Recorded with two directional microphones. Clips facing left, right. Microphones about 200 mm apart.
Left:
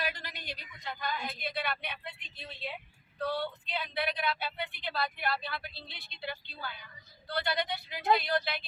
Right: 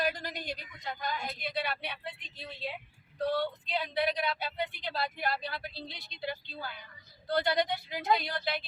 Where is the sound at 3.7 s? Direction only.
40° right (ahead or behind).